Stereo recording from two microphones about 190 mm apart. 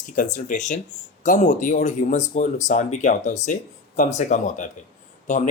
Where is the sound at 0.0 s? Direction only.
45° left (ahead or behind).